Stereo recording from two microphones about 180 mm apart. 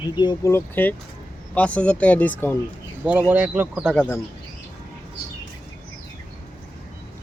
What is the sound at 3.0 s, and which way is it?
Speech, 10° right (ahead or behind).